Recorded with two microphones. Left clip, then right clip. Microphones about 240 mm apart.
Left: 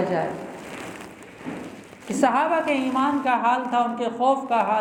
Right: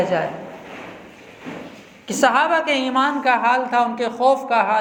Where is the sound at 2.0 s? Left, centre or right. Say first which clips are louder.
Right 4 dB; right.